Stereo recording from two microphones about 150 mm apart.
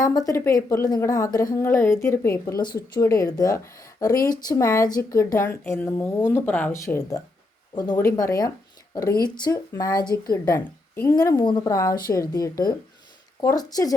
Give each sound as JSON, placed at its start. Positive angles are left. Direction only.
{"t": 0.0, "sound": "a woman's voice", "side_deg": 25}
{"t": 10.6, "sound": "a woman's voice", "side_deg": 15}